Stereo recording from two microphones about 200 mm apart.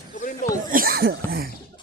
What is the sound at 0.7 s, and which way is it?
Speech, 45° right (ahead or behind).